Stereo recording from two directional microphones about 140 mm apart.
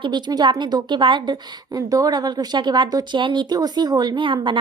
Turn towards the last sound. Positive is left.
turn(degrees=-35)  # may be behind; listen again after turning